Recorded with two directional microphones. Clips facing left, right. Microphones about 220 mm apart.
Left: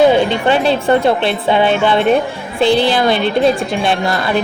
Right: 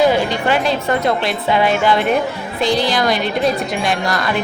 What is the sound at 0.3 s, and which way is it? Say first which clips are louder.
Speech: left 4 dB; 30° left (ahead or behind).